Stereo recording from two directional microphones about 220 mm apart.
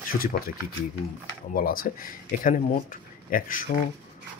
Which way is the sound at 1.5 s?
40° left (ahead or behind).